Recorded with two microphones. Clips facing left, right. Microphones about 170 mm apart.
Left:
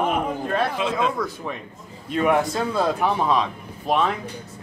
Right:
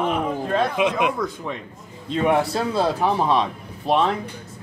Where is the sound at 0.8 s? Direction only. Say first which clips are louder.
Right 2 dB; 15° right (ahead or behind).